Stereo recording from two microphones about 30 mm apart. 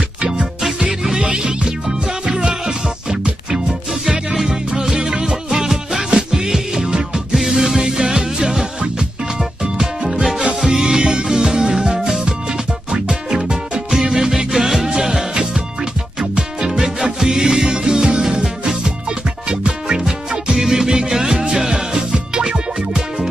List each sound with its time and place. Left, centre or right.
1.1 s music: right
4.7 s music: right
5.5 s music: centre
6.0 s music: right
7.3 s music: centre
9.4 s music: centre
11.0 s music: right
14.1 s music: centre
16.2 s music: right
16.8 s music: centre
19.5 s music: right
20.6 s music: centre